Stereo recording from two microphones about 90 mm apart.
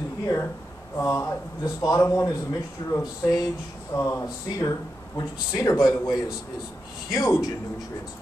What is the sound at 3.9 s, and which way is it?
Speech, 30° left (ahead or behind).